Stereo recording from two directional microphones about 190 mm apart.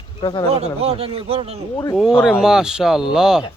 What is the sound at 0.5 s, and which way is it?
A man's voice, 30° right (ahead or behind).